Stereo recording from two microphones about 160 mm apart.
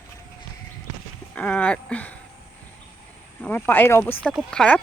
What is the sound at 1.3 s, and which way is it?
Speech, 10° left (ahead or behind).